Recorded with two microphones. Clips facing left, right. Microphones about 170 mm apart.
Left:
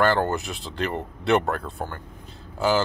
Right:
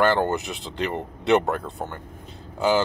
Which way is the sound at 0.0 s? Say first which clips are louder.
Right 1 dB; 20° right (ahead or behind).